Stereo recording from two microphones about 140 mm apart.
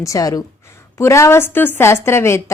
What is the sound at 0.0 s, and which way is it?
A woman's voice, 25° left (ahead or behind).